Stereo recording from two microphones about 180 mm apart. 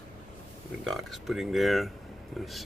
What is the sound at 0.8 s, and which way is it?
Speech, centre (ahead or behind).